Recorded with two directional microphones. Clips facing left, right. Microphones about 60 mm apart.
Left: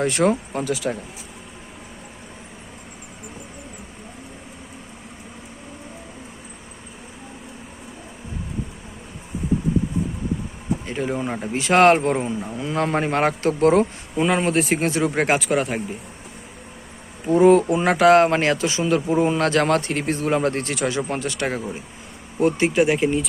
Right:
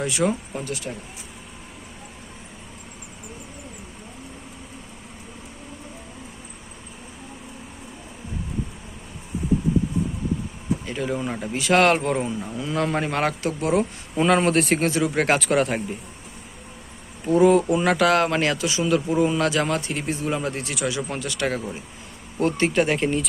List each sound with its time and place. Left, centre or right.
0.0 s speech: left
0.5 s speech: left
10.8 s speech: left
14.2 s speech: centre
14.8 s speech: left
15.4 s speech: centre
17.2 s speech: left
19.5 s speech: left; by 23.3 s centre